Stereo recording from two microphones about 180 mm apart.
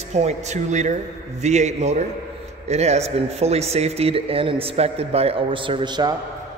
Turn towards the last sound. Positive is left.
turn(degrees=-25)  # may be behind; listen again after turning